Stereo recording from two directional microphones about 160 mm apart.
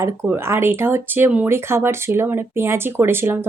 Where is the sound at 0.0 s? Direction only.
15° right (ahead or behind).